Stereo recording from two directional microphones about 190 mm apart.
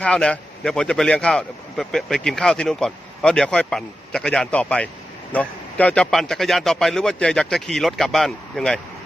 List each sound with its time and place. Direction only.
0.0 s speech: 5° left (ahead or behind)